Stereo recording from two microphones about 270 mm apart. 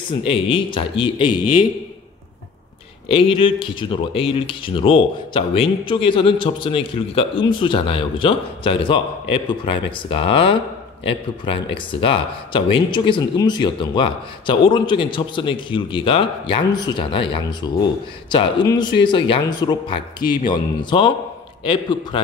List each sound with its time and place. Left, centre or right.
0.3 s speech: centre
3.1 s speech: centre
20.2 s speech: left
20.9 s speech: centre